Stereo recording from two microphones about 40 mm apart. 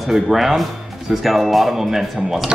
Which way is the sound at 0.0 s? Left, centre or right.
Centre.